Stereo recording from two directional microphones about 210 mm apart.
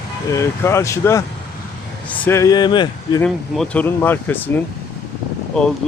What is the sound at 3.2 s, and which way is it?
Speech, centre (ahead or behind).